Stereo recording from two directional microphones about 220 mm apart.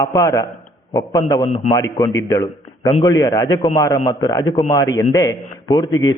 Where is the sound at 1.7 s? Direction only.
10° left (ahead or behind).